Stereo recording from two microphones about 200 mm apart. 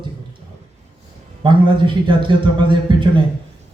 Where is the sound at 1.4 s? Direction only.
25° right (ahead or behind).